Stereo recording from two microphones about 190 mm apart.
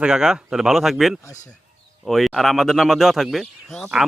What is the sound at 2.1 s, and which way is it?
Speech, centre (ahead or behind).